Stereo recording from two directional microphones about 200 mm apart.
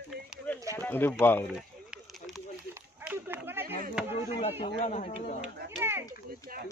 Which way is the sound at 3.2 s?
10° right (ahead or behind).